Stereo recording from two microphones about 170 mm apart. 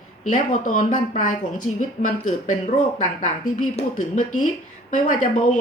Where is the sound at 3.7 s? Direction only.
45° left (ahead or behind).